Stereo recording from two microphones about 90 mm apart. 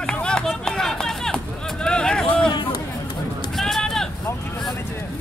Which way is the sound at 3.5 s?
5° left (ahead or behind).